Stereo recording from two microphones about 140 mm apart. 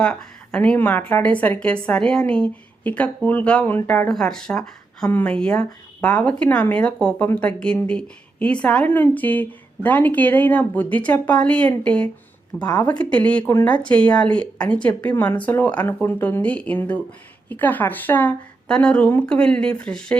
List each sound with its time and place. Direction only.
0.0 s a woman's voice: 5° left (ahead or behind)